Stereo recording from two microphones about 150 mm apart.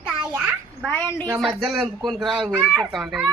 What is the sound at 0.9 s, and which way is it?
Speech, 10° left (ahead or behind).